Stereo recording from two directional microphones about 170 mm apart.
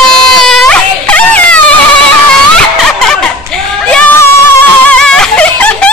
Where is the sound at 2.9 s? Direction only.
5° left (ahead or behind).